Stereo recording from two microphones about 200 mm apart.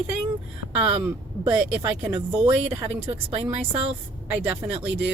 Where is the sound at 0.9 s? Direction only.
30° right (ahead or behind).